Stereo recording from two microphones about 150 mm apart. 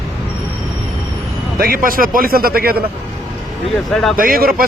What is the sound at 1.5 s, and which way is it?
A man's voice, 80° right.